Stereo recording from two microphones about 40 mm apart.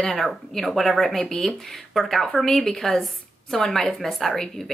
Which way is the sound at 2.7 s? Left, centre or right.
Centre.